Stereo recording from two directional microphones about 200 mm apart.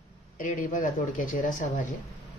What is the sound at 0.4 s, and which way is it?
Speech, 40° left (ahead or behind).